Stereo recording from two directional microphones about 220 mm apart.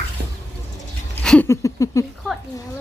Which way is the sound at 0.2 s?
45° right (ahead or behind).